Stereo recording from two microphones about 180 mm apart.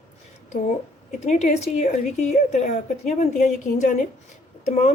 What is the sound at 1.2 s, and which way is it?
A woman's voice, 40° left (ahead or behind).